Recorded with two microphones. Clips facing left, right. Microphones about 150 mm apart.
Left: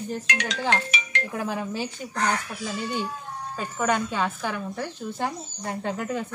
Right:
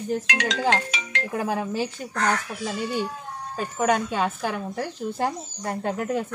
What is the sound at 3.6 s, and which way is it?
Speech, 5° right (ahead or behind).